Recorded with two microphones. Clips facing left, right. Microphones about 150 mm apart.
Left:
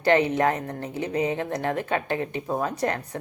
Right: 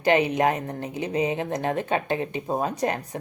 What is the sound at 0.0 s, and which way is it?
A woman's voice, 15° right (ahead or behind).